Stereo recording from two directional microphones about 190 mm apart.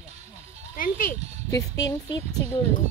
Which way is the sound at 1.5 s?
20° left (ahead or behind).